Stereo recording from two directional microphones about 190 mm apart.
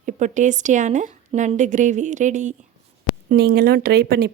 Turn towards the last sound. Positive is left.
turn(degrees=-55)  # may be behind; listen again after turning